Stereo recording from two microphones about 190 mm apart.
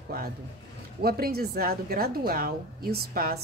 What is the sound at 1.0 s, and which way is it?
A woman's voice, 50° right (ahead or behind).